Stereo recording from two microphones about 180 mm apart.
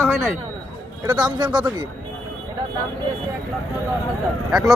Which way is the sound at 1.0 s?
25° right (ahead or behind).